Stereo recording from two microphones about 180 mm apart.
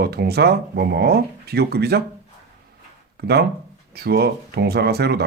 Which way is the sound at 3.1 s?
65° right (ahead or behind).